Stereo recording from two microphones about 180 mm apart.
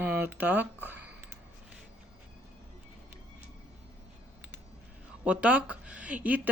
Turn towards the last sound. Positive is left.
turn(degrees=-10)  # may be behind; listen again after turning